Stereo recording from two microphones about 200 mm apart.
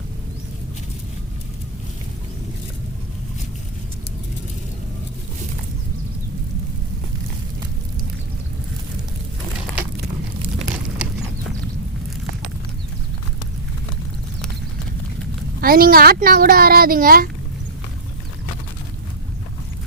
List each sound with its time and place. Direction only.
15.6 s speech: 45° right (ahead or behind)